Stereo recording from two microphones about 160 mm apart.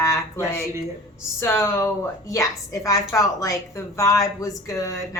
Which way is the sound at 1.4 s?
15° left (ahead or behind).